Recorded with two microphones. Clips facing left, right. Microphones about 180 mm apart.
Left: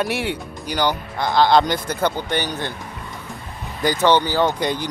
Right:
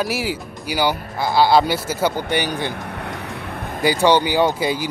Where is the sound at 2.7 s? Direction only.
65° right (ahead or behind).